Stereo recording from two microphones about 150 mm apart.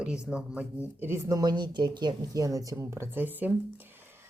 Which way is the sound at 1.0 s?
20° right (ahead or behind).